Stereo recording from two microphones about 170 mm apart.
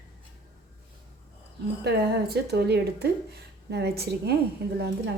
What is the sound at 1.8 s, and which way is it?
A woman's voice, 70° right (ahead or behind).